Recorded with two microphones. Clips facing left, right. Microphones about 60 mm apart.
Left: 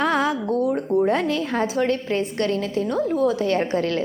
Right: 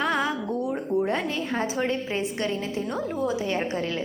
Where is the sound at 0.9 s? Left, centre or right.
Left.